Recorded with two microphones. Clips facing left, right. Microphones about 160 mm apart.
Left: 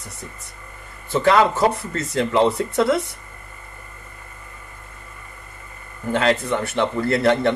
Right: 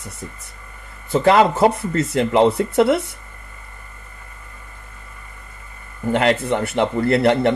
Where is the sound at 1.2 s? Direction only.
25° right (ahead or behind).